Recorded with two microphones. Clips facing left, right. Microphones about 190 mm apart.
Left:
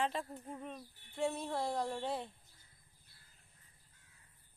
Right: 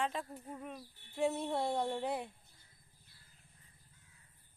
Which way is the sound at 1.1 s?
20° right (ahead or behind).